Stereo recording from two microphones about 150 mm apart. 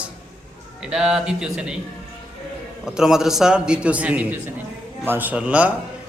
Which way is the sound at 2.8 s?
5° right (ahead or behind).